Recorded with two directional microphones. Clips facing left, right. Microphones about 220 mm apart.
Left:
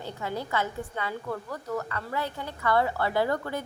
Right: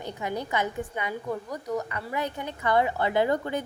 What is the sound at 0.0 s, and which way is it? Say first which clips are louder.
A woman's voice: right 2 dB; 15° right (ahead or behind).